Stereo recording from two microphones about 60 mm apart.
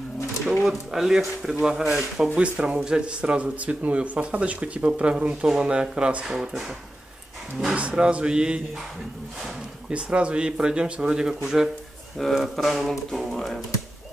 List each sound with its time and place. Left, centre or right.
0.7 s speech: centre
2.2 s speech: centre
7.7 s speech: centre
9.8 s speech: centre
12.2 s speech: centre